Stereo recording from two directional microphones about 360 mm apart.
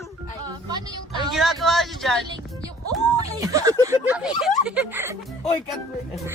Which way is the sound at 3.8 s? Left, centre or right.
Centre.